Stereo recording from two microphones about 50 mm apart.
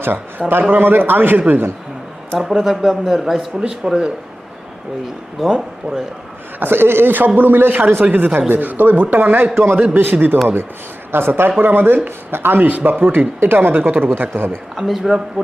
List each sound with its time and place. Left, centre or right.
0.0 s a man's voice: right
2.4 s speech: centre
5.4 s speech: centre
6.6 s speech: right
14.8 s speech: centre